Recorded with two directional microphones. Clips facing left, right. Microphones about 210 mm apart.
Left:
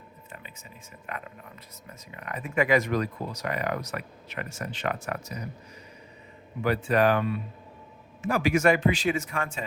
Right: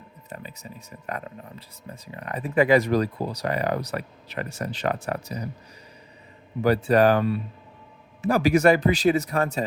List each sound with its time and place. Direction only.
0.3 s speech: 40° right (ahead or behind)
6.6 s speech: 35° right (ahead or behind)